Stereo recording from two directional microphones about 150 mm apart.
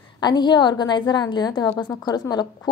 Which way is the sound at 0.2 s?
30° left (ahead or behind).